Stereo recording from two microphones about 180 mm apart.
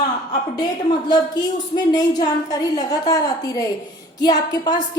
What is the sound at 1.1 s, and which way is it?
A woman's voice, 25° left (ahead or behind).